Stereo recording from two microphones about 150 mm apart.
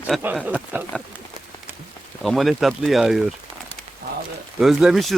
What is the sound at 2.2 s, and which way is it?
Speech, centre (ahead or behind).